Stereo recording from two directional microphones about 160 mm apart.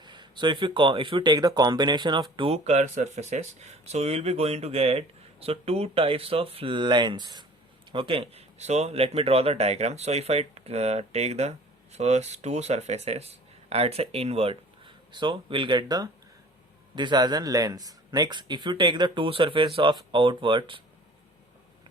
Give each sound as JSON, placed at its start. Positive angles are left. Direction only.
{"t": 0.0, "sound": "speech", "side_deg": -30}